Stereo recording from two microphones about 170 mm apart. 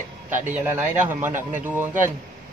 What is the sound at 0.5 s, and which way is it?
Speech, 15° right (ahead or behind).